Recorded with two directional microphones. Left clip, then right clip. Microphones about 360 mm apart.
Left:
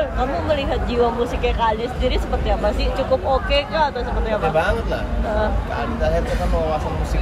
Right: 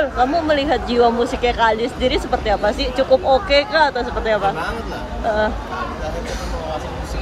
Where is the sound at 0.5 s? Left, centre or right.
Right.